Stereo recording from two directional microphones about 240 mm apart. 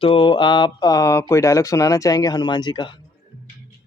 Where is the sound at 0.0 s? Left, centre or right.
Left.